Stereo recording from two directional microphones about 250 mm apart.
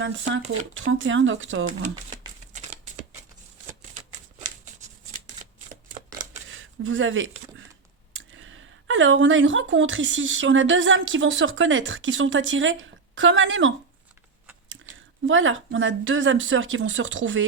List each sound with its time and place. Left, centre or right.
0.0 s speech: right
2.5 s a sound: right
6.8 s speech: right
15.3 s speech: right